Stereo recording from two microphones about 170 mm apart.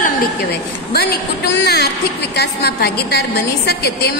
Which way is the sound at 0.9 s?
70° left (ahead or behind).